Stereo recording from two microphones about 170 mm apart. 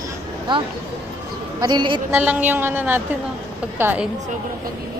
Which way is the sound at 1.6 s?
25° right (ahead or behind).